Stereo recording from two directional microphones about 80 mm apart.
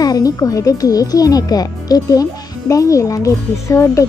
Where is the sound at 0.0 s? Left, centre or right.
Left.